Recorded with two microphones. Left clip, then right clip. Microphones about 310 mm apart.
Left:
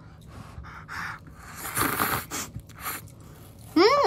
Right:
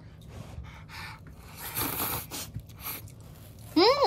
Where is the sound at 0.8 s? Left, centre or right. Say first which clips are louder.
Left 8 dB; right.